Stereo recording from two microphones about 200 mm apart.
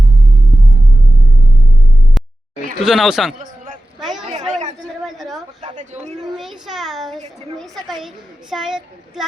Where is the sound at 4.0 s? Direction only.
Centre (ahead or behind).